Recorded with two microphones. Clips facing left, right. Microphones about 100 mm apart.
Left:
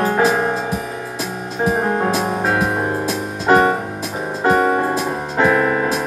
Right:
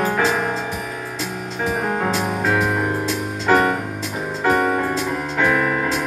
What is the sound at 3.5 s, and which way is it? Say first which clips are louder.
Music: left 3 dB; 30° left (ahead or behind).